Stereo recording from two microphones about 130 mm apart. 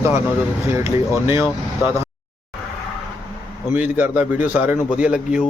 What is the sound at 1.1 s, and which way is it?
Speech, 20° right (ahead or behind).